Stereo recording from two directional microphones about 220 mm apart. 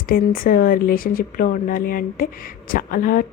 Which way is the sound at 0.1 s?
40° left (ahead or behind).